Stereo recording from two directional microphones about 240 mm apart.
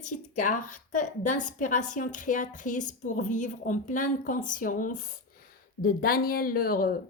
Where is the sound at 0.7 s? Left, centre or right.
Left.